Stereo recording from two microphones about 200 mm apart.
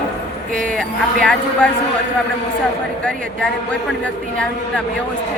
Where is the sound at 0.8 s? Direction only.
5° left (ahead or behind).